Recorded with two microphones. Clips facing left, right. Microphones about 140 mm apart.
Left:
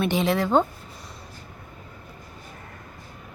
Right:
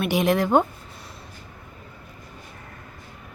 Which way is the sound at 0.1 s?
15° right (ahead or behind).